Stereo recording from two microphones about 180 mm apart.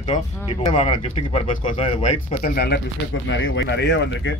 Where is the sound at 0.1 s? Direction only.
45° left (ahead or behind).